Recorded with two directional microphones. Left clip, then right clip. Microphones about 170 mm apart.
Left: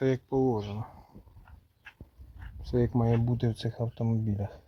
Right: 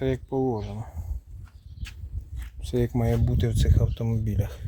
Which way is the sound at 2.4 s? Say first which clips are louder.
Right 2 dB; 20° right (ahead or behind).